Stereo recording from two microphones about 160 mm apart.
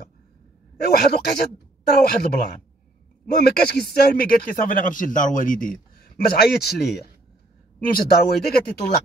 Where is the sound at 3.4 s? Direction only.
70° left (ahead or behind).